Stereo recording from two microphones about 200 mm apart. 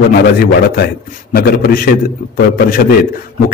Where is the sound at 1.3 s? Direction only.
50° left (ahead or behind).